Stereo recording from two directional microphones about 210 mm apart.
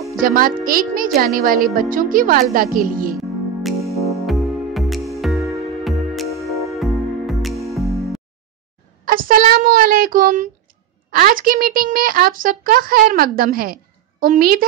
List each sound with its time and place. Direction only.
0.2 s a woman's voice: 40° right (ahead or behind)
4.0 s music: centre (ahead or behind)
9.0 s a woman's voice: 40° right (ahead or behind)